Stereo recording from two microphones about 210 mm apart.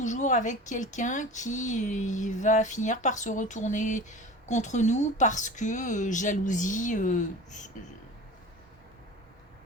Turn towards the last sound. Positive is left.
turn(degrees=35)  # may be behind; listen again after turning